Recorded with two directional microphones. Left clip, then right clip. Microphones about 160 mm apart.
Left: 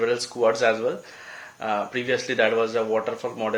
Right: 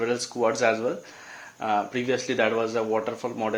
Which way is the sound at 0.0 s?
40° right (ahead or behind).